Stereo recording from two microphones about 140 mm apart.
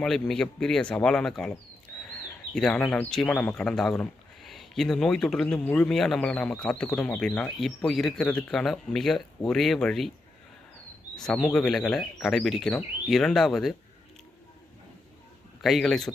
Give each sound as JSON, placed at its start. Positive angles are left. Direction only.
{"t": 0.0, "sound": "speech", "side_deg": 5}
{"t": 11.1, "sound": "speech", "side_deg": 5}
{"t": 15.6, "sound": "speech", "side_deg": 0}